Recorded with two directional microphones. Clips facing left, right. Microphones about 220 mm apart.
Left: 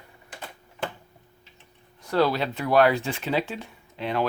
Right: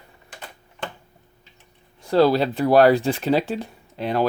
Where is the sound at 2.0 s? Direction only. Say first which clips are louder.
Right 6 dB; 30° right (ahead or behind).